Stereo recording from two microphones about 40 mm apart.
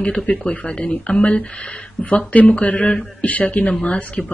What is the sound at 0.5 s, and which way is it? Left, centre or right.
Speech, left.